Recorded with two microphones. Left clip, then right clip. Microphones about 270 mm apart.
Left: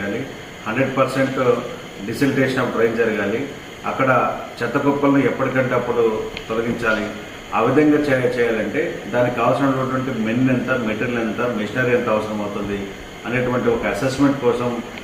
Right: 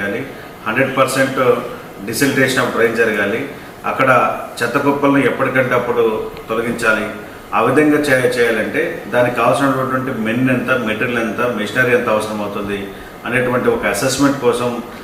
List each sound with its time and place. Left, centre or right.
0.7 s a man's voice: centre
13.2 s a man's voice: centre